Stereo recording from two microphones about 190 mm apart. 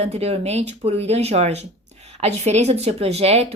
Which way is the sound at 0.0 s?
35° right (ahead or behind).